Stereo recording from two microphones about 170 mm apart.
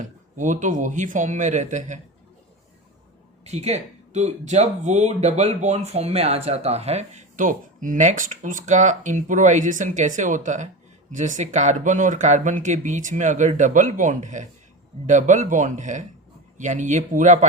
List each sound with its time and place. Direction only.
0.0 s speech: 45° right (ahead or behind)
3.4 s speech: 40° right (ahead or behind)